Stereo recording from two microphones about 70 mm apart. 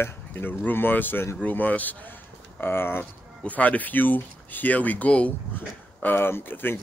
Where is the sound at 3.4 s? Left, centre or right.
Left.